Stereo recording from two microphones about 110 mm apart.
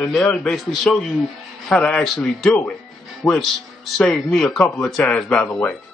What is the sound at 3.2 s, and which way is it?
A man's voice, 15° left (ahead or behind).